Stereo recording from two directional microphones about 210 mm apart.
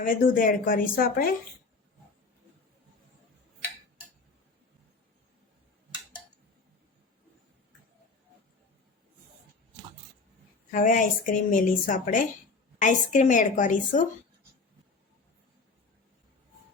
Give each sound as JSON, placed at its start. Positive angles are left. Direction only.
{"t": 0.0, "sound": "speech", "side_deg": 40}
{"t": 10.7, "sound": "a woman's voice", "side_deg": 40}